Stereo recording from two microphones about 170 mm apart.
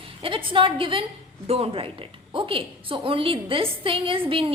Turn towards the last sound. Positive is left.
turn(degrees=-30)  # may be behind; listen again after turning